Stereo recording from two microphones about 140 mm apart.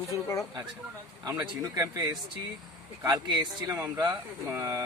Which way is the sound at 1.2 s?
30° right (ahead or behind).